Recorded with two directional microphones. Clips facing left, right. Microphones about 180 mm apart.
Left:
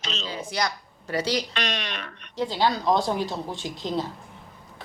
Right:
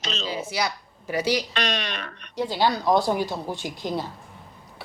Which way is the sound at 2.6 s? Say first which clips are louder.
Right 2 dB; 15° right (ahead or behind).